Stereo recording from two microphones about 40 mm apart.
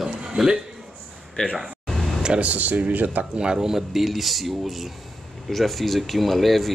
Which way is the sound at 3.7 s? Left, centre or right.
Centre.